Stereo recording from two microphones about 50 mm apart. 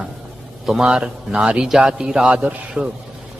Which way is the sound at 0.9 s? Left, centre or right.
Centre.